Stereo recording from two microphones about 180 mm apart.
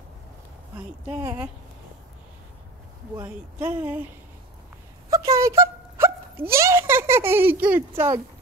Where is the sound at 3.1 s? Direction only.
10° right (ahead or behind).